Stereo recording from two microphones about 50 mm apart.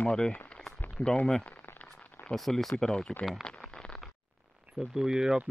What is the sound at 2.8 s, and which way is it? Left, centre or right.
Speech, centre.